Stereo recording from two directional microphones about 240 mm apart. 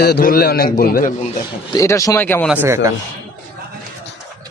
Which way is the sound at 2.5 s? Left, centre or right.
Centre.